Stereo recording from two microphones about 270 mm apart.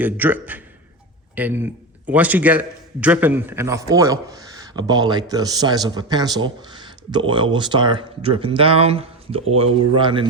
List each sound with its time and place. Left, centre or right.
0.0 s a man's voice: centre